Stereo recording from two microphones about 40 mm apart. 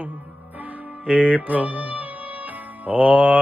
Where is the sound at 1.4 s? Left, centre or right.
Right.